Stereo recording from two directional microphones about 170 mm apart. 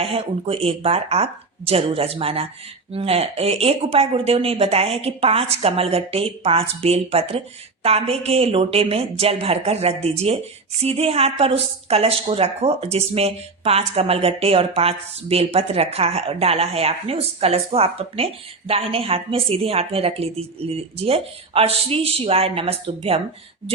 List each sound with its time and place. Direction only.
0.0 s a woman's voice: 35° right (ahead or behind)